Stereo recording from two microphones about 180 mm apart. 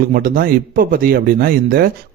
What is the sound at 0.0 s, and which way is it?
Speech, 55° right (ahead or behind).